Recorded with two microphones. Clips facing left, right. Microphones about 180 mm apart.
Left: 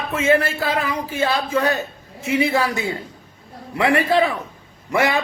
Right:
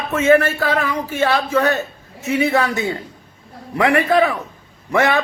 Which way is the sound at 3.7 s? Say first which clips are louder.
Right 2 dB; 25° left (ahead or behind).